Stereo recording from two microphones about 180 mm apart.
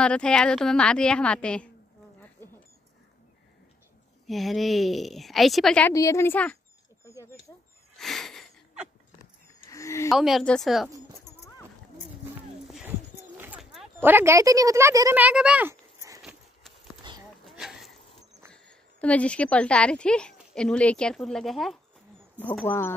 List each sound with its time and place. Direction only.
0.0 s a woman's voice: 5° left (ahead or behind)
4.3 s a woman's voice: centre (ahead or behind)
5.9 s a woman's voice: 15° left (ahead or behind)
8.0 s a sound: centre (ahead or behind)
9.2 s a sound: 15° left (ahead or behind)
10.1 s a woman's voice: centre (ahead or behind)
13.4 s speech: 5° right (ahead or behind)
16.2 s a sound: centre (ahead or behind)
17.1 s livestock: 25° right (ahead or behind)
17.5 s bee: centre (ahead or behind)
18.5 s a woman's voice: 5° left (ahead or behind)